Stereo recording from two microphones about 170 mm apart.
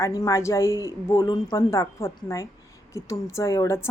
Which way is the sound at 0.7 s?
20° right (ahead or behind).